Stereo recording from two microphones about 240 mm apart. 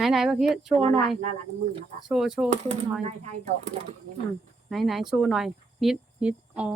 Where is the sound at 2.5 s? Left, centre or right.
Right.